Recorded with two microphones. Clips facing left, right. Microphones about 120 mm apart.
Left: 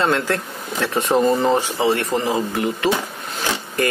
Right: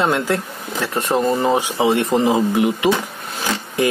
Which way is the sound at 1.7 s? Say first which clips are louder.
Right 3 dB; 20° right (ahead or behind).